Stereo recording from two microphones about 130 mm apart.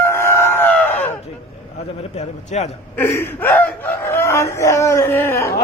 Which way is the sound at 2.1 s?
55° left (ahead or behind).